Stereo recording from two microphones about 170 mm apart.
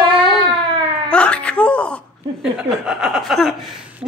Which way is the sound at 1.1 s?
5° left (ahead or behind).